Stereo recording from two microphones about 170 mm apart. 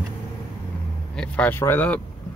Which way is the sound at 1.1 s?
5° left (ahead or behind).